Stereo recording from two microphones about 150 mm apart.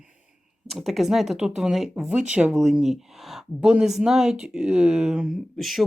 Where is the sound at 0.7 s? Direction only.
Centre (ahead or behind).